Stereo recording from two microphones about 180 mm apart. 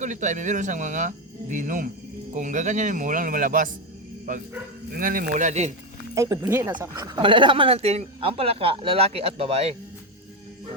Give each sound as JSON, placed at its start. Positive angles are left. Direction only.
{"t": 0.0, "sound": "speech", "side_deg": -45}
{"t": 6.1, "sound": "speech", "side_deg": -20}
{"t": 6.9, "sound": "speech", "side_deg": -25}